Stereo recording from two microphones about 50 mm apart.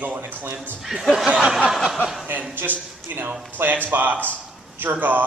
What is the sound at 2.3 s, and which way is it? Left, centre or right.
A man's voice, right.